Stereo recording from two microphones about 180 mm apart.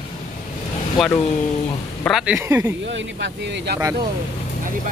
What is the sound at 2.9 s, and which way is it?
Speech, 90° right.